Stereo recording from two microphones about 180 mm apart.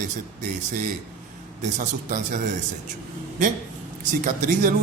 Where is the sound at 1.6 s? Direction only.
45° right (ahead or behind).